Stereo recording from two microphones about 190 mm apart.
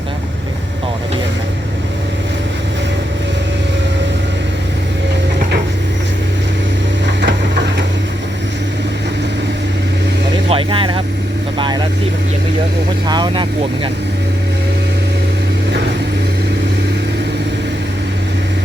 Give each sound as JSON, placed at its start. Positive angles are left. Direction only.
{"t": 7.3, "sound": "a sound", "side_deg": -70}
{"t": 10.5, "sound": "vehicle", "side_deg": -25}
{"t": 13.1, "sound": "vehicle", "side_deg": -25}